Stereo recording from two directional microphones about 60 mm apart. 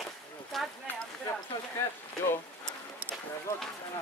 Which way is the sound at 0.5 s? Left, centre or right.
Centre.